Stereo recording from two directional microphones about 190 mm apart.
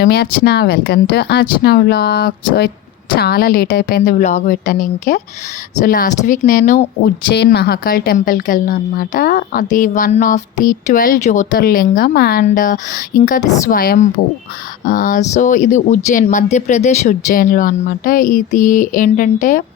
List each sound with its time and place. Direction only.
0.0 s a woman's voice: 60° left (ahead or behind)
7.3 s a woman's voice: 60° left (ahead or behind)